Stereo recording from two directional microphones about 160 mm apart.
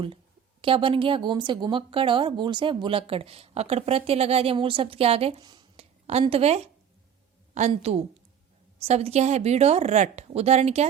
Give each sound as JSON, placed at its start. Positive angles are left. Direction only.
{"t": 0.6, "sound": "speech", "side_deg": -35}
{"t": 5.7, "sound": "a sound", "side_deg": -40}
{"t": 6.2, "sound": "speech", "side_deg": -40}
{"t": 7.7, "sound": "speech", "side_deg": -40}